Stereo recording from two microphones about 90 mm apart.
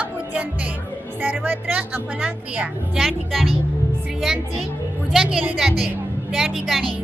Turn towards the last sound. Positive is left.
turn(degrees=0)  # may be behind; listen again after turning